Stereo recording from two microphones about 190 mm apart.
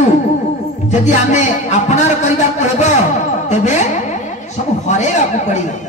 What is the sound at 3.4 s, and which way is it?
Speech, 35° left (ahead or behind).